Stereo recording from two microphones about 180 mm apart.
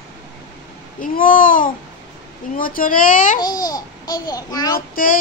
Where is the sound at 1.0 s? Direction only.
50° left (ahead or behind).